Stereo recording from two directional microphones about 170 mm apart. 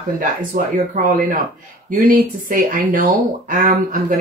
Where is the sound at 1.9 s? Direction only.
55° right (ahead or behind).